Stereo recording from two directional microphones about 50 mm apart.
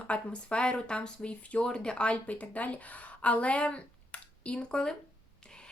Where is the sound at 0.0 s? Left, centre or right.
Left.